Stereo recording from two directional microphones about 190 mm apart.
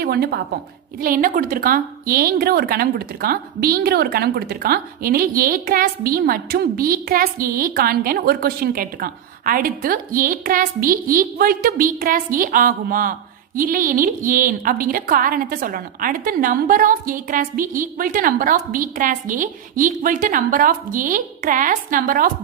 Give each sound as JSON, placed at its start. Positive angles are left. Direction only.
{"t": 0.0, "sound": "a woman's voice", "side_deg": -55}